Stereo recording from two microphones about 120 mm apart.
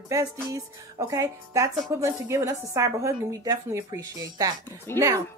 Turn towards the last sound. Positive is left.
turn(degrees=-25)  # may be behind; listen again after turning